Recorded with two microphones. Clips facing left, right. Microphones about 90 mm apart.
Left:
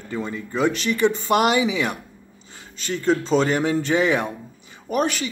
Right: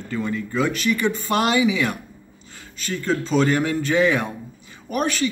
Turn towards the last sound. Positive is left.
turn(degrees=20)  # may be behind; listen again after turning